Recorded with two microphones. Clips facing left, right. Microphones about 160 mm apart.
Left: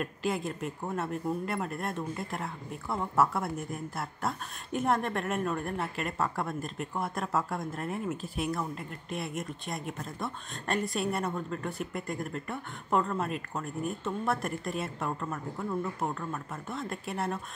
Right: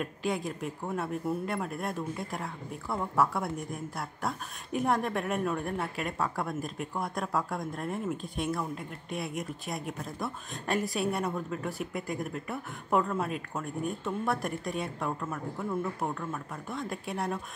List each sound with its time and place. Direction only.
0.0 s speech: centre (ahead or behind)